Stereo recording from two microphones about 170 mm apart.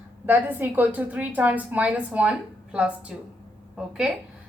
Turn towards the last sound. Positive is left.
turn(degrees=-5)  # may be behind; listen again after turning